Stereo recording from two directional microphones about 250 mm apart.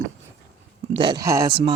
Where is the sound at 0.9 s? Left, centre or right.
Centre.